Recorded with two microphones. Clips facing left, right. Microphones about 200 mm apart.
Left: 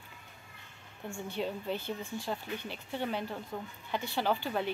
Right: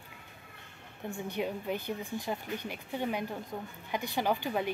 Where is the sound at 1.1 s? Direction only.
15° right (ahead or behind).